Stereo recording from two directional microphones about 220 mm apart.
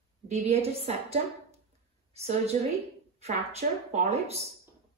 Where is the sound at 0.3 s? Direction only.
30° right (ahead or behind).